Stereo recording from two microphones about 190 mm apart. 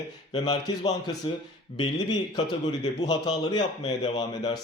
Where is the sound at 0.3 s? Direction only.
20° left (ahead or behind).